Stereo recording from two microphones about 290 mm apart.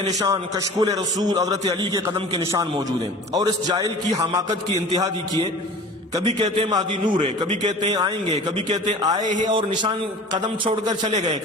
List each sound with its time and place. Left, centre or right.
0.0 s a man's voice: centre